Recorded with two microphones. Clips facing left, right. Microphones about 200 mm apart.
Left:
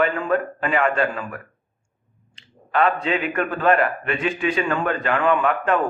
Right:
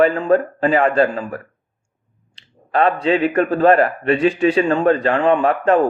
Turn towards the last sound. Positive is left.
turn(degrees=-35)  # may be behind; listen again after turning